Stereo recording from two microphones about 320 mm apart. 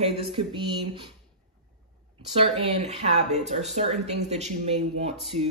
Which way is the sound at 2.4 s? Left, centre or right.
Centre.